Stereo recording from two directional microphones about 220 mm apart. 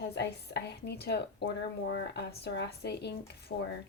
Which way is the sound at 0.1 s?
50° left (ahead or behind).